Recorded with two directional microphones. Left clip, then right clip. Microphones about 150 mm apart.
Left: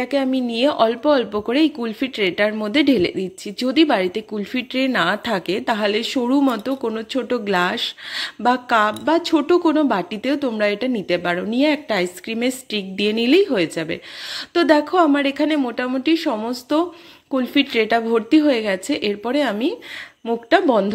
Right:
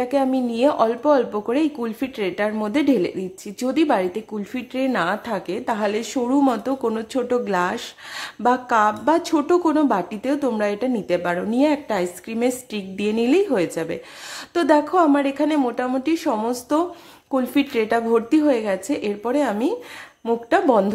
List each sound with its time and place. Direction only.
0.0 s speech: 15° left (ahead or behind)
6.6 s speech: 5° left (ahead or behind)